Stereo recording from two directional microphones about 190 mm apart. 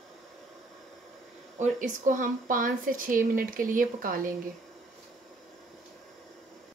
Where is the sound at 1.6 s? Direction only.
40° right (ahead or behind).